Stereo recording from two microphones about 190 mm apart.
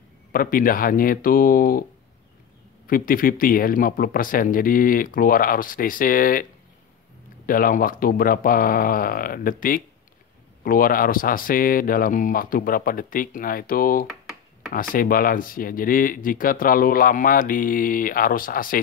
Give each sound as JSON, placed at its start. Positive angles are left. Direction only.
{"t": 0.3, "sound": "speech", "side_deg": 50}
{"t": 2.9, "sound": "speech", "side_deg": 50}
{"t": 7.4, "sound": "speech", "side_deg": 45}
{"t": 14.0, "sound": "a sound", "side_deg": 0}
{"t": 14.7, "sound": "speech", "side_deg": 50}